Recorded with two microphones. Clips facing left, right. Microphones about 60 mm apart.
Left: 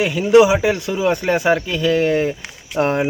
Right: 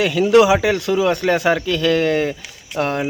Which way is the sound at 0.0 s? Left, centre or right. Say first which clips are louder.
Left 1 dB; centre.